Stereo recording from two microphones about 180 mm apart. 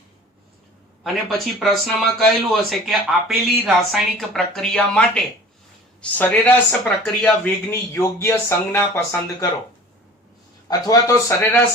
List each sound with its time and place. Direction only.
1.0 s speech: centre (ahead or behind)
7.7 s speech: 15° left (ahead or behind)
10.7 s speech: 20° left (ahead or behind)